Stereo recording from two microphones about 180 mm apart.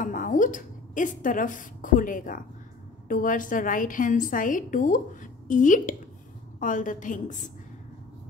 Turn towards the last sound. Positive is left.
turn(degrees=45)  # may be behind; listen again after turning